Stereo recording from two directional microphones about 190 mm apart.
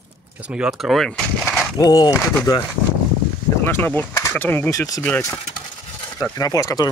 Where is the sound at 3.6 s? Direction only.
10° left (ahead or behind).